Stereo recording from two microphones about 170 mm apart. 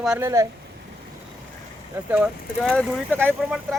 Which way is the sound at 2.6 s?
5° left (ahead or behind).